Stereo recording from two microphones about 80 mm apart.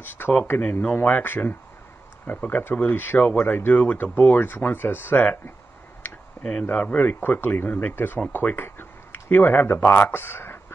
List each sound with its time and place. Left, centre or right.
0.0 s speech: left
6.6 s speech: centre